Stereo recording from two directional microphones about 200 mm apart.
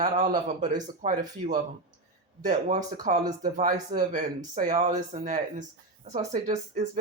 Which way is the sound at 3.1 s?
35° right (ahead or behind).